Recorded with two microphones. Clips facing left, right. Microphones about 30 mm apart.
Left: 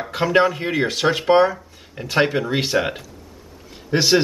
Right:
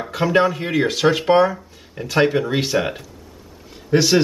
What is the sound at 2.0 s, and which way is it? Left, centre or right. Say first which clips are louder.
Speech: right 2 dB; centre.